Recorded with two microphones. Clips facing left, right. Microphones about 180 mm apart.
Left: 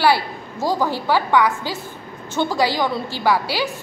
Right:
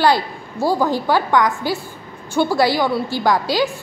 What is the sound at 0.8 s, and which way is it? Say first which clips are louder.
Speech: right 1 dB; 15° right (ahead or behind).